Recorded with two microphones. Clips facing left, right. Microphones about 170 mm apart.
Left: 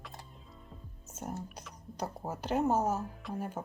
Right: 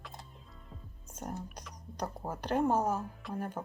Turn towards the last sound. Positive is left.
turn(degrees=5)  # may be behind; listen again after turning